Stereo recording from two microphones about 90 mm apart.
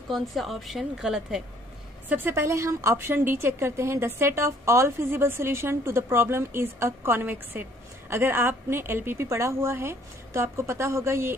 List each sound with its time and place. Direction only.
0.1 s a woman's voice: centre (ahead or behind)
2.0 s a woman's voice: 25° right (ahead or behind)